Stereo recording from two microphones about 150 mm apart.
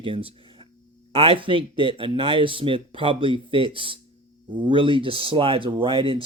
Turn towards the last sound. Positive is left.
turn(degrees=-35)  # may be behind; listen again after turning